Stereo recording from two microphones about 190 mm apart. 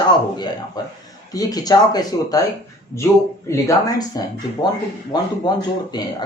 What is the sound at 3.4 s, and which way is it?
A man's voice, 15° left (ahead or behind).